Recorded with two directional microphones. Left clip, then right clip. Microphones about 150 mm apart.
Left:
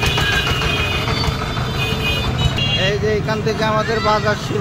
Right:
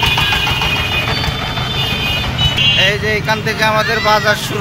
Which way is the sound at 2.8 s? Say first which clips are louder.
Right 5 dB; 10° left (ahead or behind).